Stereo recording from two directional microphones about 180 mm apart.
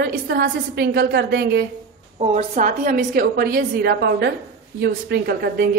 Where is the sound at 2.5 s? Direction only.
50° right (ahead or behind).